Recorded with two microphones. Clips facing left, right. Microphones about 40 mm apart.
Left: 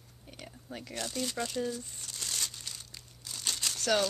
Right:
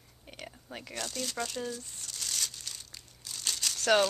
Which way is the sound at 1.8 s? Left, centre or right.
Centre.